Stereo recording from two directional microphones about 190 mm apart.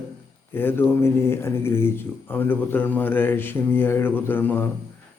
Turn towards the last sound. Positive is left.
turn(degrees=10)  # may be behind; listen again after turning